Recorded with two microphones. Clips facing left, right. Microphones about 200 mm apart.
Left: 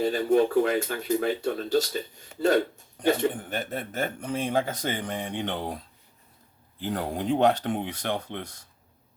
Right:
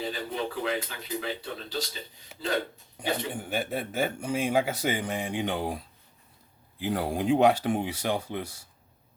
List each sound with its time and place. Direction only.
0.0 s speech: 50° left (ahead or behind)
3.0 s speech: 10° right (ahead or behind)